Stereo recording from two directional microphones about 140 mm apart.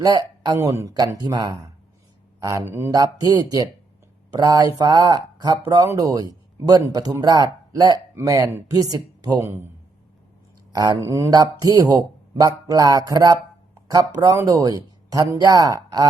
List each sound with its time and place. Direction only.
0.0 s speech: 25° right (ahead or behind)
10.7 s speech: 25° right (ahead or behind)